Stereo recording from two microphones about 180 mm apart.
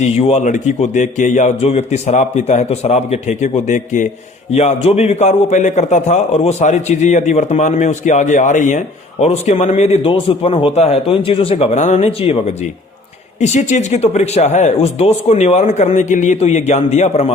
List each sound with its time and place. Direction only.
0.0 s a man's voice: 35° left (ahead or behind)